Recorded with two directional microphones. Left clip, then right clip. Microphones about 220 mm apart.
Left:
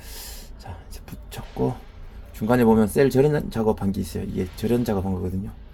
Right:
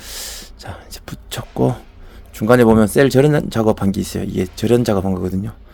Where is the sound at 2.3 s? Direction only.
35° right (ahead or behind).